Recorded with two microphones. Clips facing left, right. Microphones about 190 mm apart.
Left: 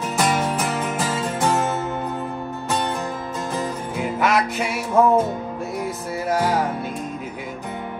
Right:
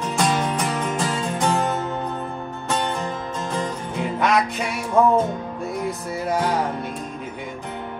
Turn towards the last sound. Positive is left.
turn(degrees=5)  # may be behind; listen again after turning